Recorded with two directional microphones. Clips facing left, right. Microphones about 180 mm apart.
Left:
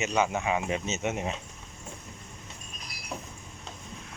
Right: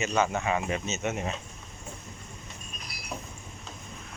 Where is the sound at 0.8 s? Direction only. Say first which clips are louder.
Left 1 dB; 20° left (ahead or behind).